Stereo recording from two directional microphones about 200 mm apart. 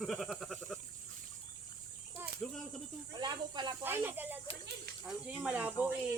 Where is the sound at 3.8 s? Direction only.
10° right (ahead or behind).